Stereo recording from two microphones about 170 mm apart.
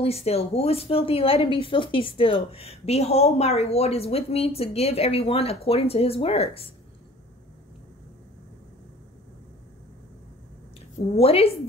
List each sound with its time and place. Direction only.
0.0 s a woman's voice: 35° left (ahead or behind)
11.1 s a woman's voice: 35° left (ahead or behind)